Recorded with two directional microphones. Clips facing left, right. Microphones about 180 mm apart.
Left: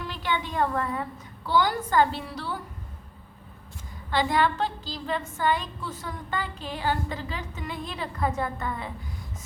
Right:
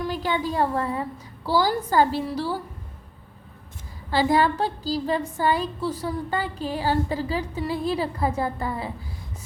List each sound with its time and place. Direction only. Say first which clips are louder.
0.0 s a woman's voice: right 5 dB; 40° right (ahead or behind)
4.1 s speech: right 4 dB; 35° right (ahead or behind)